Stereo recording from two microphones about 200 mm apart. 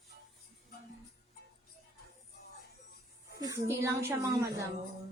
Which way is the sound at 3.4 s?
15° right (ahead or behind).